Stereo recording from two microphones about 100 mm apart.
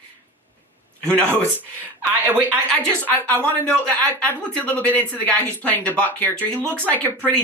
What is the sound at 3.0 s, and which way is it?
Speech, 15° left (ahead or behind).